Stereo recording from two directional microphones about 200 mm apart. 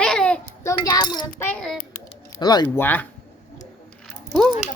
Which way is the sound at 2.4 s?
20° left (ahead or behind).